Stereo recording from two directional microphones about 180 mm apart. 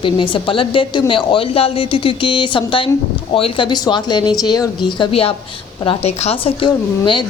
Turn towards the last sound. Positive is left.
turn(degrees=30)  # may be behind; listen again after turning